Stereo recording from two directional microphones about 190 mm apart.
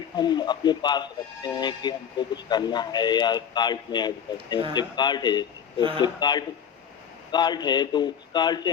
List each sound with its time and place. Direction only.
0.2 s speech: 25° left (ahead or behind)